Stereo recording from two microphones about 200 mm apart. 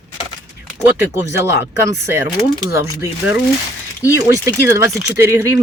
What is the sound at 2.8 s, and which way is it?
Speech, 15° right (ahead or behind).